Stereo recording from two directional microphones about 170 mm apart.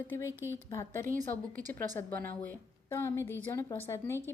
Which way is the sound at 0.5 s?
15° left (ahead or behind).